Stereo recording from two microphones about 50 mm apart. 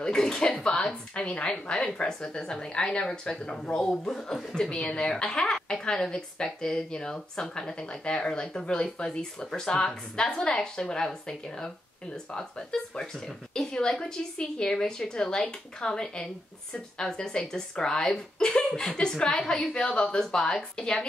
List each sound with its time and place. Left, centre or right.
0.0 s a woman's voice: centre